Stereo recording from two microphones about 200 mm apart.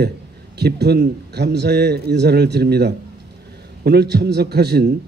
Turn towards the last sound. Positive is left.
turn(degrees=-55)  # may be behind; listen again after turning